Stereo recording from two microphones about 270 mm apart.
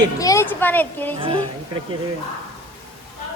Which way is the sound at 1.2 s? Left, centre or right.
Centre.